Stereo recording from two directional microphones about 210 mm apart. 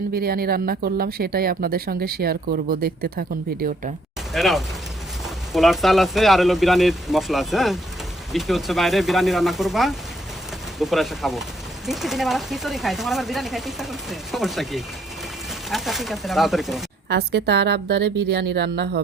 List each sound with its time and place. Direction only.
0.1 s speech: 45° right (ahead or behind)
4.4 s speech: centre (ahead or behind)
17.1 s speech: 50° right (ahead or behind)